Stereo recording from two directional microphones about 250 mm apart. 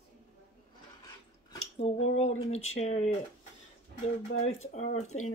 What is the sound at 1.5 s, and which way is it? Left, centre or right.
Speech, left.